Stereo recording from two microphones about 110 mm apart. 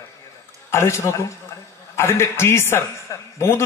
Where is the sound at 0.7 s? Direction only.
25° left (ahead or behind).